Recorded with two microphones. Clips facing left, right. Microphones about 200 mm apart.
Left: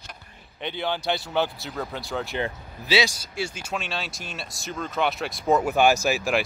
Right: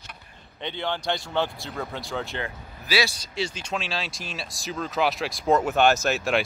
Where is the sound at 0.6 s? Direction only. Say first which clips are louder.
Left 1 dB; 5° left (ahead or behind).